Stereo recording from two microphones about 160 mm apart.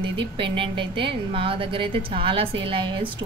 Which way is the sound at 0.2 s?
30° right (ahead or behind).